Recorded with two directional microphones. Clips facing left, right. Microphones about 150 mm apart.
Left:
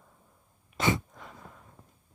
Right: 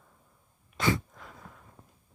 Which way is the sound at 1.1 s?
Centre (ahead or behind).